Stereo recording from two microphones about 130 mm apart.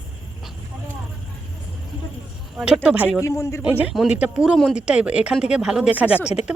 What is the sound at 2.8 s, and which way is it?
Speech, 10° right (ahead or behind).